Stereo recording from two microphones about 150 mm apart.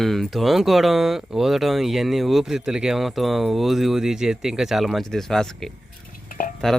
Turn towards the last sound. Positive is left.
turn(degrees=65)  # may be behind; listen again after turning